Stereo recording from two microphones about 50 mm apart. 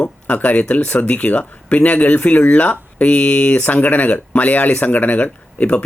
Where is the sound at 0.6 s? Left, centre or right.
Centre.